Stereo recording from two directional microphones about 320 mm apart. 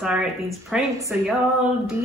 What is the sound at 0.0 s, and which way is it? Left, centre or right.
Speech, centre.